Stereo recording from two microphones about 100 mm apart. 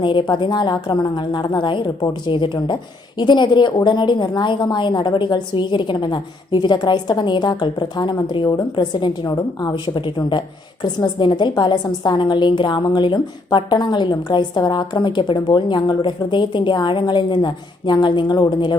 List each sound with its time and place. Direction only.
0.0 s a woman's voice: 50° left (ahead or behind)